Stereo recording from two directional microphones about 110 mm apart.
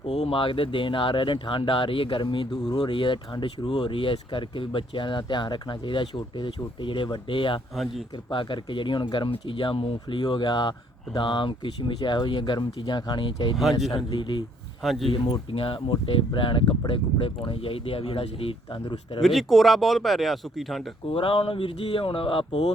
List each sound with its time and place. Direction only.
0.0 s speech: 70° left (ahead or behind); by 13.6 s 45° left (ahead or behind)
13.6 s speech: centre (ahead or behind)
14.1 s speech: 45° left (ahead or behind)
14.8 s speech: centre (ahead or behind)
15.5 s speech: 55° left (ahead or behind)
19.2 s speech: centre (ahead or behind)
21.1 s speech: 55° left (ahead or behind)